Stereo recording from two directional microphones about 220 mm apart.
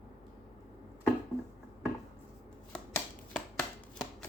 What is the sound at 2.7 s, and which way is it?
Chopping, 5° left (ahead or behind).